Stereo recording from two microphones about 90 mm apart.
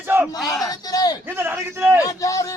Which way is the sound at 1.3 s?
25° right (ahead or behind).